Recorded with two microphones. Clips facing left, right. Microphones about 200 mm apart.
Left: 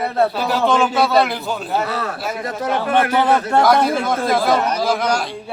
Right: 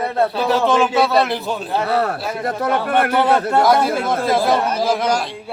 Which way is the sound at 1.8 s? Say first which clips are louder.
Right 4 dB; 60° right (ahead or behind).